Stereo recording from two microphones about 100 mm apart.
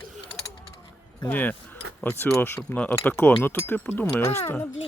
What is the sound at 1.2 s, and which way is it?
Keys jangling, 20° left (ahead or behind).